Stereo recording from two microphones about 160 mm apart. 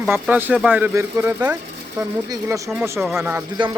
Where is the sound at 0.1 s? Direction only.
10° right (ahead or behind).